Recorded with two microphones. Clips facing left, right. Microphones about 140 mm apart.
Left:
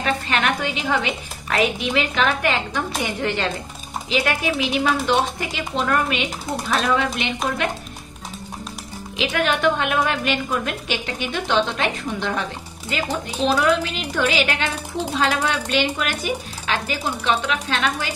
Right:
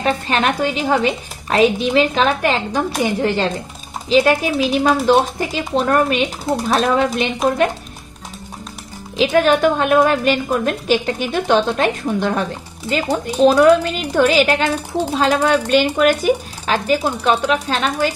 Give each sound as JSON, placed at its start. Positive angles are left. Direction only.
{"t": 0.0, "sound": "a woman's voice", "side_deg": -35}
{"t": 9.1, "sound": "a woman's voice", "side_deg": -35}